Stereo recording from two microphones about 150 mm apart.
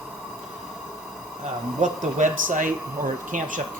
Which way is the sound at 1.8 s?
55° right (ahead or behind).